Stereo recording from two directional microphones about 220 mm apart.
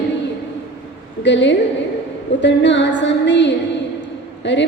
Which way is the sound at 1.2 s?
55° left (ahead or behind).